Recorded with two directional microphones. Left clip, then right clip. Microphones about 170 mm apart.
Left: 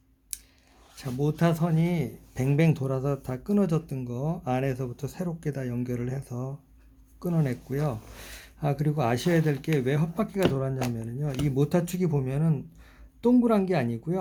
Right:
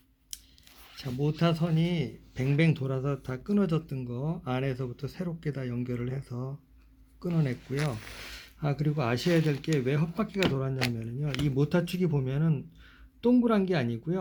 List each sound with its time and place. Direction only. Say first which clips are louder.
1.0 s speech: left 2 dB; 10° left (ahead or behind)